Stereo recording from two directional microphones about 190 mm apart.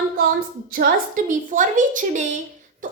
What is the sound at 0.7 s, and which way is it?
A woman's voice, 50° right (ahead or behind).